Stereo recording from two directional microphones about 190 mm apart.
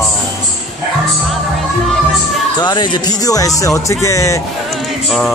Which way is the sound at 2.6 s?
20° left (ahead or behind).